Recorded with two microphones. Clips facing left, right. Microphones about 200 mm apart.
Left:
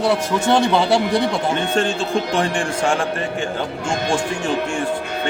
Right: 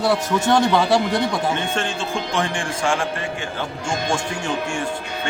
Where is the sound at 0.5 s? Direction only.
25° left (ahead or behind).